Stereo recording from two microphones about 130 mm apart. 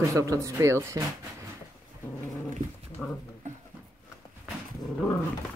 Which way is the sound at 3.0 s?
5° left (ahead or behind).